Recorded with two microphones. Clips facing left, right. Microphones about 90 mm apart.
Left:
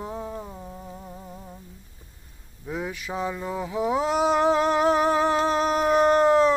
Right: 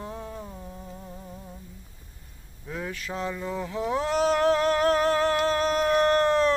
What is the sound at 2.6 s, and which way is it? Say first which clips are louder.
Speech: left 3 dB; 15° left (ahead or behind).